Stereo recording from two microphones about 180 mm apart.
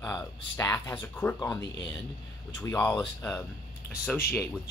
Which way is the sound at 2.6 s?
15° left (ahead or behind).